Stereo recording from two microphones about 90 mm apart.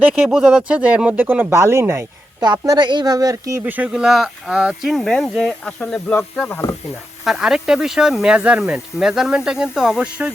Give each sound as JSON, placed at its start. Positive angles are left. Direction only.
{"t": 0.0, "sound": "speech", "side_deg": -10}
{"t": 2.4, "sound": "speech", "side_deg": -50}
{"t": 3.6, "sound": "speech", "side_deg": -15}
{"t": 7.3, "sound": "speech", "side_deg": -5}